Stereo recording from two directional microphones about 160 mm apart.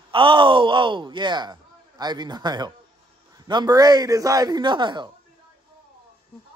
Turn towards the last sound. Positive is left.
turn(degrees=-30)  # may be behind; listen again after turning